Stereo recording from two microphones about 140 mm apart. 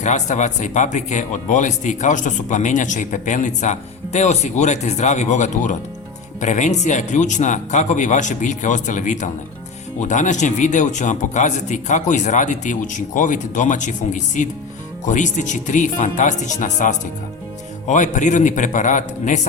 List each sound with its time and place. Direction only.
0.0 s speech: 60° left (ahead or behind)